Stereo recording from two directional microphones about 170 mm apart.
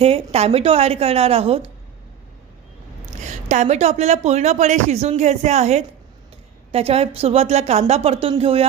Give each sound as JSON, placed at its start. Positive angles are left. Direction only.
{"t": 0.0, "sound": "speech", "side_deg": -35}
{"t": 3.2, "sound": "a woman's voice", "side_deg": -45}